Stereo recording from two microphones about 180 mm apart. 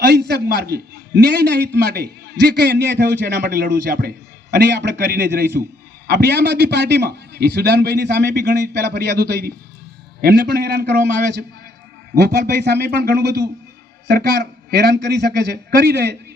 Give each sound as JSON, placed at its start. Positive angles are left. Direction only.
{"t": 0.0, "sound": "a man's voice", "side_deg": -65}
{"t": 4.7, "sound": "a man's voice", "side_deg": -70}
{"t": 12.1, "sound": "a man's voice", "side_deg": -65}